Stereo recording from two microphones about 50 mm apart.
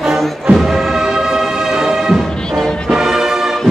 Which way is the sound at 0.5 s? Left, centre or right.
Centre.